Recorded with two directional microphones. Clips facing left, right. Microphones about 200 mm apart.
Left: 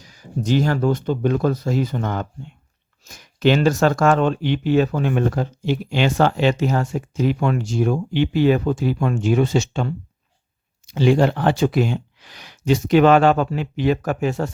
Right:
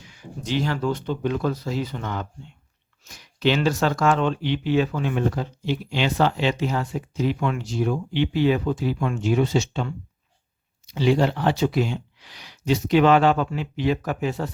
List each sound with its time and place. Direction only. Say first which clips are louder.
0.0 s speech: left 8 dB; 40° left (ahead or behind)